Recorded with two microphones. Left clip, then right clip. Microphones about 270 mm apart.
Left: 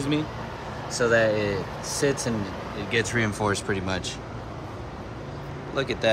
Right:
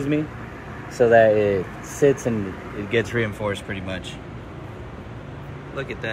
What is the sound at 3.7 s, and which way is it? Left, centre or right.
Speech, left.